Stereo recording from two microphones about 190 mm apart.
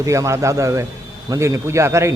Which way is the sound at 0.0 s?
15° right (ahead or behind).